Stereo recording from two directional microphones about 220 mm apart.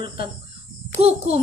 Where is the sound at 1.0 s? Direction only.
30° right (ahead or behind).